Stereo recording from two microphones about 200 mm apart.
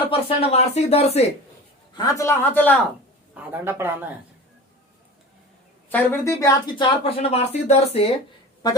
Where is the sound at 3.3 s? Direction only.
10° right (ahead or behind).